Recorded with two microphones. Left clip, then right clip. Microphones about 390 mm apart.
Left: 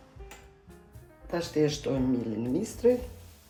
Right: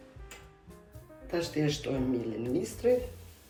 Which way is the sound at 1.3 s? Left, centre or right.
Left.